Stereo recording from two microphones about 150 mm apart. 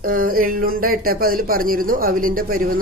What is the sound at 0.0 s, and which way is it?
Speech, 70° right (ahead or behind).